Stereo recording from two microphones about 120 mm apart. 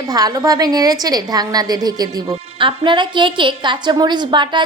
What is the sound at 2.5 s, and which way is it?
A woman's voice, 45° right (ahead or behind).